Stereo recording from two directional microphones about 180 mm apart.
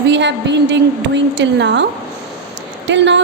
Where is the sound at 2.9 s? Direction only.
80° right.